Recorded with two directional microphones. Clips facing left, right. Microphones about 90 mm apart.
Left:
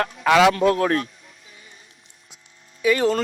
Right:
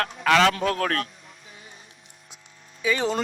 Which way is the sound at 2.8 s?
Centre (ahead or behind).